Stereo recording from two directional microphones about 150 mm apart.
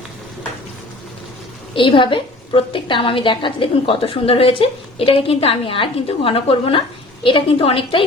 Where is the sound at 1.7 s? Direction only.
35° left (ahead or behind).